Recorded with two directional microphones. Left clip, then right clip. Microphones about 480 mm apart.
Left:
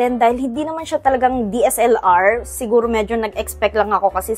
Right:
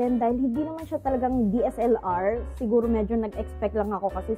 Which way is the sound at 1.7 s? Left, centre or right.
Centre.